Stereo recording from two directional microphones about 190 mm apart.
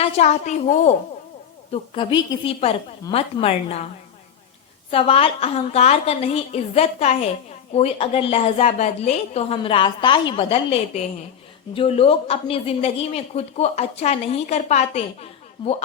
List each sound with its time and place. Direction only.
0.0 s a woman's voice: 35° left (ahead or behind)
1.7 s a woman's voice: 25° left (ahead or behind)
4.9 s a woman's voice: 30° left (ahead or behind)